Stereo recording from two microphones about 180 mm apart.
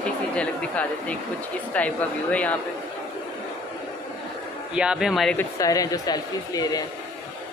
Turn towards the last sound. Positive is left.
turn(degrees=20)  # may be behind; listen again after turning